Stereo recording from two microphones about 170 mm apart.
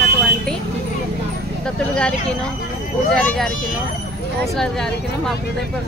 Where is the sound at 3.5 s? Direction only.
50° left (ahead or behind).